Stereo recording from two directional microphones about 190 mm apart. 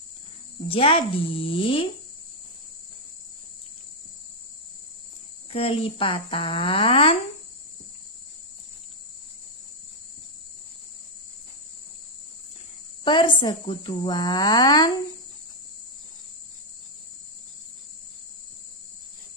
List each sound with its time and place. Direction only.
0.7 s speech: 30° left (ahead or behind)
5.5 s speech: 30° left (ahead or behind)
13.0 s speech: 25° left (ahead or behind)